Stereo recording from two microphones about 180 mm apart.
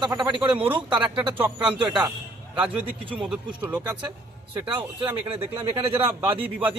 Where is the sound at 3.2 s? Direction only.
5° right (ahead or behind).